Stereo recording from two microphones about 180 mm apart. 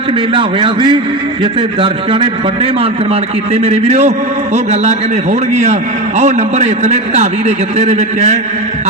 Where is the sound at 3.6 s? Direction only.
40° right (ahead or behind).